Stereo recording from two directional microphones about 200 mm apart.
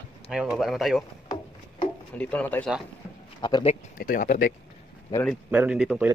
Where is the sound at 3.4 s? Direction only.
25° left (ahead or behind).